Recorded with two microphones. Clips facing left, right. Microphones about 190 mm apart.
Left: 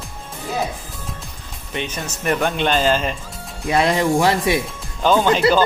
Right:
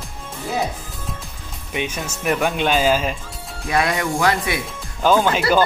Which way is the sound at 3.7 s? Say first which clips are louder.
Left 4 dB; 25° left (ahead or behind).